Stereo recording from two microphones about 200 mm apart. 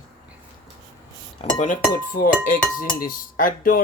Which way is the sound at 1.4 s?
35° left (ahead or behind).